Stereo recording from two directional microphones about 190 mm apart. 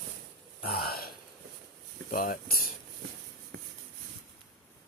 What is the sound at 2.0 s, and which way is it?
Speech, 45° left (ahead or behind).